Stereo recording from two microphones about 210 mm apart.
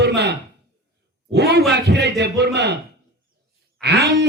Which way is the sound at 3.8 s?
50° right (ahead or behind).